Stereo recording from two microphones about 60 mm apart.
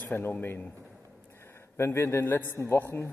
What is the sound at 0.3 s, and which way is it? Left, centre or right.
Speech, left.